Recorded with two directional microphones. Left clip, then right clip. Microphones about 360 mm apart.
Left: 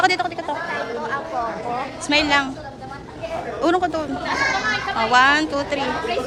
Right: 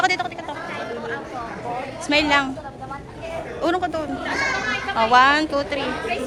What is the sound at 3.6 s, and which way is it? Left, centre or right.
A woman's voice, centre.